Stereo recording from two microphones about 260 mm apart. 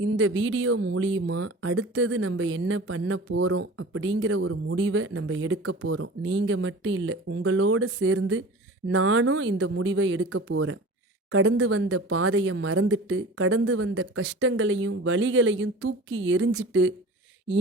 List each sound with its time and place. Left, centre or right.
0.0 s speech: right